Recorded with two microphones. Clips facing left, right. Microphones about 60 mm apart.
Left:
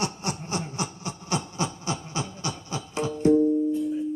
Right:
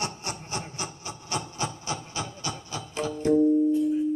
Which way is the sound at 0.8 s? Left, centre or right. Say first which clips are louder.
Left 4 dB; left.